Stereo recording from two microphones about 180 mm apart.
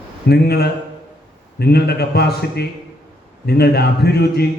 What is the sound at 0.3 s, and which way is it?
A man's voice, 65° left (ahead or behind).